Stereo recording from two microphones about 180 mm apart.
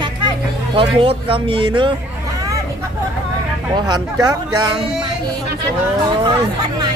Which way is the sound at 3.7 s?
25° right (ahead or behind).